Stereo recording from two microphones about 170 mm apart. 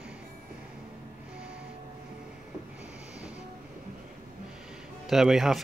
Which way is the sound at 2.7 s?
5° right (ahead or behind).